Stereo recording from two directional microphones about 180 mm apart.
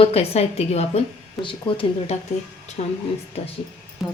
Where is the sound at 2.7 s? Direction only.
40° left (ahead or behind).